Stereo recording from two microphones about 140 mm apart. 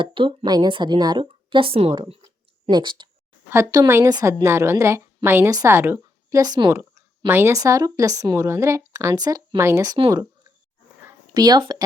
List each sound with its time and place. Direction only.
0.0 s speech: 40° right (ahead or behind)
3.5 s a woman's voice: 25° right (ahead or behind)
10.1 s a sound: 25° right (ahead or behind)